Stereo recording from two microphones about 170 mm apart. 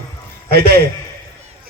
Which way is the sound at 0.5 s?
70° right (ahead or behind).